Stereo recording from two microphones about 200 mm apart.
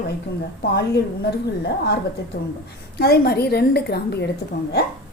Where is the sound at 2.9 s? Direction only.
50° left (ahead or behind).